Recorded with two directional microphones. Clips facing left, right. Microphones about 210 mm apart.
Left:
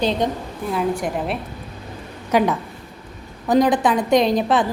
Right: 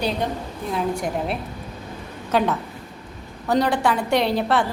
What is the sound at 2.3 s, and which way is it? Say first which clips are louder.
A woman's voice: left 3 dB; 10° left (ahead or behind).